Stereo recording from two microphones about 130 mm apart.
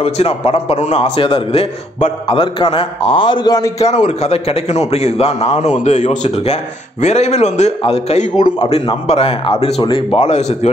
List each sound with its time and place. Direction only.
0.0 s a man's voice: 50° left (ahead or behind)
2.2 s a man's voice: 40° left (ahead or behind)
3.8 s a man's voice: 60° left (ahead or behind)